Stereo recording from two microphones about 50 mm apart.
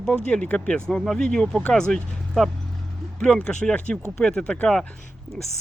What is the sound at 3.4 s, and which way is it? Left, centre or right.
Speech, left.